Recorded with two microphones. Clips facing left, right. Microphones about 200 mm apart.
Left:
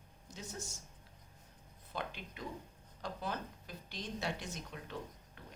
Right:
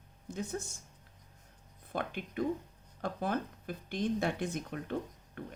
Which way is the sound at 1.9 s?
55° right (ahead or behind).